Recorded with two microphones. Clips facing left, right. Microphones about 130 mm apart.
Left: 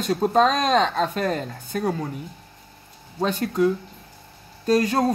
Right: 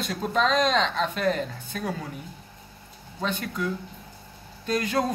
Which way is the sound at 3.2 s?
40° left (ahead or behind).